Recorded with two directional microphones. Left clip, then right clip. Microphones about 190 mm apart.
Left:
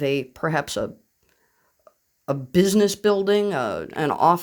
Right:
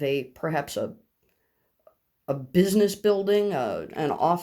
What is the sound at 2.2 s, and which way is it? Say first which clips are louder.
Speech: left 3 dB; 35° left (ahead or behind).